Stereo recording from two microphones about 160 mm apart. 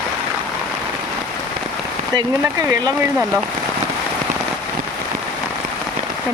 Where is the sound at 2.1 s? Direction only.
25° right (ahead or behind).